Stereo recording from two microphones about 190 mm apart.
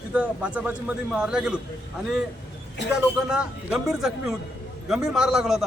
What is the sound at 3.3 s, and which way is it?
A man's voice, 5° right (ahead or behind).